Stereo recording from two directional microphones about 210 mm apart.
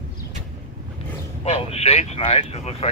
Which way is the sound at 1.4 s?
30° left (ahead or behind).